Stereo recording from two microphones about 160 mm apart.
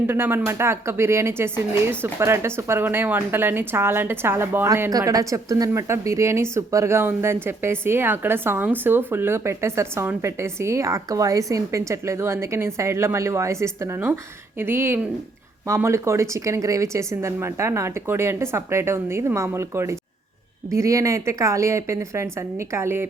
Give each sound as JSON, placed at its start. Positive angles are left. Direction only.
{"t": 0.1, "sound": "speech", "side_deg": -15}